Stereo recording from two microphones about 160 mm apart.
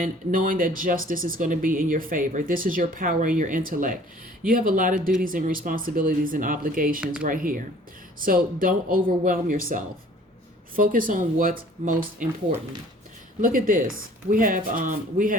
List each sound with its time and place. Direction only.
0.0 s speech: 55° right (ahead or behind)
13.4 s speech: 60° right (ahead or behind)